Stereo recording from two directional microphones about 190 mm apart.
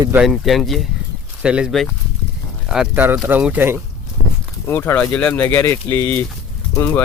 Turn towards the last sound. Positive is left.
turn(degrees=10)  # may be behind; listen again after turning